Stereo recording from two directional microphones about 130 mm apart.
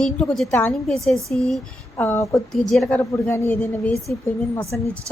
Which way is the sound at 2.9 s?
15° left (ahead or behind).